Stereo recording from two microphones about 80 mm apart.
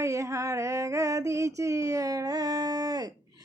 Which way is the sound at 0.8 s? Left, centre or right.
Right.